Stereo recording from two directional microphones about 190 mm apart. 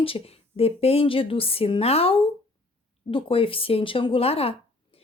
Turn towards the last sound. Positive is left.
turn(degrees=30)  # may be behind; listen again after turning